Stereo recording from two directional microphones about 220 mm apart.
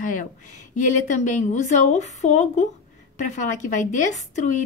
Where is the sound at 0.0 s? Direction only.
35° left (ahead or behind).